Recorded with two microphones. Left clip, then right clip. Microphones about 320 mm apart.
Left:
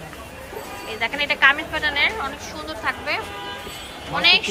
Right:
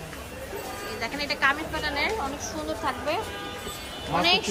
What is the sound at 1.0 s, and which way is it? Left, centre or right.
A woman's voice, centre.